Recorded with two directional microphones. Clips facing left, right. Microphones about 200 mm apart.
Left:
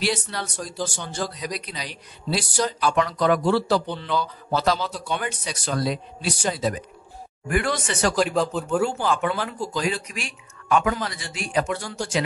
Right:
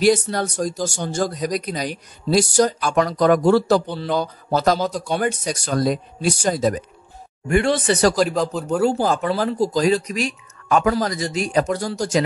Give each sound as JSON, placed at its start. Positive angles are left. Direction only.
{"t": 0.0, "sound": "speech", "side_deg": -45}
{"t": 7.4, "sound": "speech", "side_deg": -25}